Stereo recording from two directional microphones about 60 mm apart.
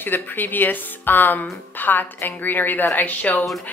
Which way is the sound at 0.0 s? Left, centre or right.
Left.